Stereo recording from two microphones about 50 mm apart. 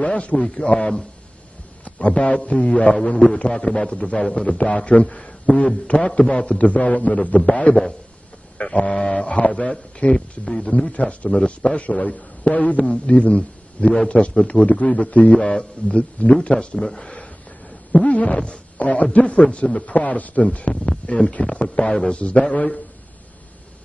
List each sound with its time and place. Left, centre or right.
0.0 s a man's voice: left
0.7 s speech: centre
1.9 s a man's voice: left
3.7 s a man's voice: left
4.0 s a man's voice: centre
8.7 s a man's voice: centre
11.2 s a man's voice: centre
16.7 s speech: centre
17.9 s a man's voice: left
19.9 s a man's voice: left